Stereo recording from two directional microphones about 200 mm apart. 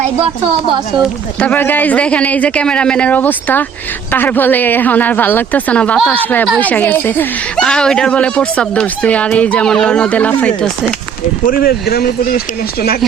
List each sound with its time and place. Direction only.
1.4 s speech: 10° left (ahead or behind)
11.4 s speech: 50° left (ahead or behind)